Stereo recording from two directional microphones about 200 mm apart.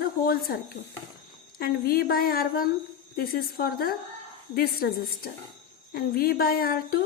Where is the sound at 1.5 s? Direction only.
50° left (ahead or behind).